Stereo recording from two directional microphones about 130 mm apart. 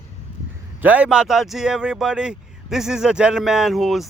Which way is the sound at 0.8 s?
10° right (ahead or behind).